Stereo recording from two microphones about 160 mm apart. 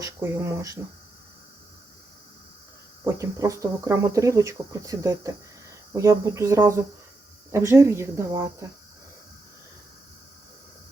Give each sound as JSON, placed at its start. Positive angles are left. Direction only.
{"t": 0.0, "sound": "speech", "side_deg": -20}
{"t": 3.0, "sound": "speech", "side_deg": -15}